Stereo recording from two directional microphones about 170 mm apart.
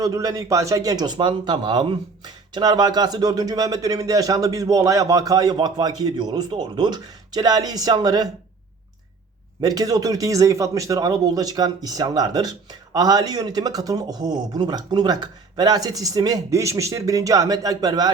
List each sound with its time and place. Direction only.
0.0 s speech: 20° right (ahead or behind)
9.6 s speech: 20° right (ahead or behind)